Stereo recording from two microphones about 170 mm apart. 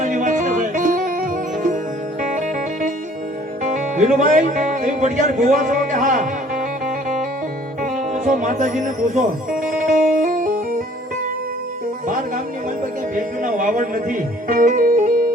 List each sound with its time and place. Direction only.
0.0 s music: 50° right (ahead or behind)
3.6 s music: 45° right (ahead or behind)
7.8 s speech: 45° right (ahead or behind)
9.6 s music: 50° right (ahead or behind)
13.1 s music: 50° right (ahead or behind)